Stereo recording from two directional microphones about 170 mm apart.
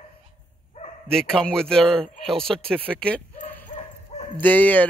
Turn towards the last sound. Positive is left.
turn(degrees=10)  # may be behind; listen again after turning